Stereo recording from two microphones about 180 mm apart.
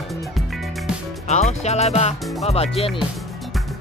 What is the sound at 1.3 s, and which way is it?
Speech, 40° left (ahead or behind).